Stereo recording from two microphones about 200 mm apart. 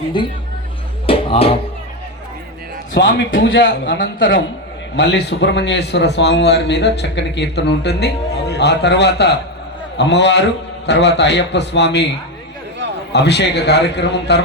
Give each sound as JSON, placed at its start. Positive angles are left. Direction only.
{"t": 0.1, "sound": "a woman's voice", "side_deg": 25}
{"t": 1.0, "sound": "music", "side_deg": 25}
{"t": 3.0, "sound": "a man's voice", "side_deg": 60}
{"t": 3.8, "sound": "a man's voice", "side_deg": 45}
{"t": 13.1, "sound": "a man's voice", "side_deg": 60}